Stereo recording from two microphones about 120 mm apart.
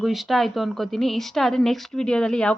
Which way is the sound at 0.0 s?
Centre (ahead or behind).